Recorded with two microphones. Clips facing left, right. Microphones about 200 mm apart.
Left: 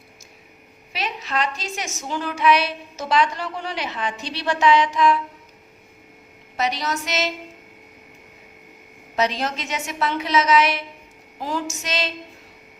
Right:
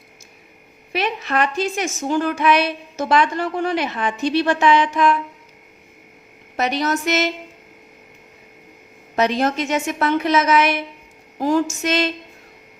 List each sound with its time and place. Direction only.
0.9 s a woman's voice: 55° right (ahead or behind)
6.6 s a woman's voice: 55° right (ahead or behind)
9.1 s a woman's voice: 55° right (ahead or behind)